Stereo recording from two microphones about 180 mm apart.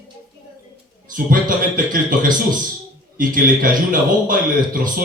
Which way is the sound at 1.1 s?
50° right (ahead or behind).